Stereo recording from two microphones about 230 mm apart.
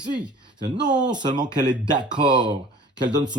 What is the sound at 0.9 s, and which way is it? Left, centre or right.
Speech, centre.